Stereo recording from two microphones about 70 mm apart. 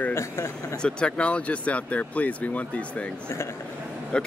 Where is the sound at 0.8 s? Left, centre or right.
Centre.